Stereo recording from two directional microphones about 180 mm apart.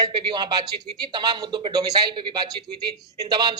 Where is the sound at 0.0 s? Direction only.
25° right (ahead or behind).